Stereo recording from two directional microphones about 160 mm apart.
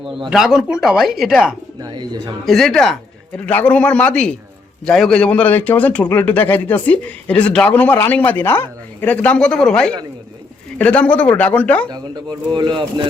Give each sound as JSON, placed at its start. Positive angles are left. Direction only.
{"t": 0.3, "sound": "speech", "side_deg": -5}
{"t": 1.8, "sound": "speech", "side_deg": -25}
{"t": 2.4, "sound": "a man's voice", "side_deg": 0}
{"t": 11.9, "sound": "speech", "side_deg": -25}